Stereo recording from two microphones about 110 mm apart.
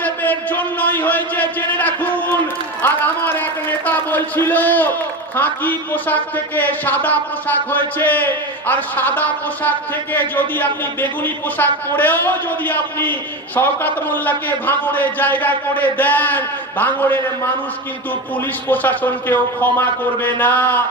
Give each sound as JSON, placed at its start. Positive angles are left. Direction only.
{"t": 0.0, "sound": "a sound", "side_deg": 15}
{"t": 5.4, "sound": "a man's voice", "side_deg": 15}
{"t": 18.7, "sound": "a man's voice", "side_deg": 15}